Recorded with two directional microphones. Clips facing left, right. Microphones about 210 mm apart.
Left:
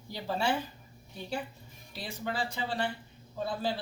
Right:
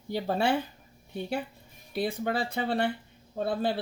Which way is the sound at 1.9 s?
55° right (ahead or behind).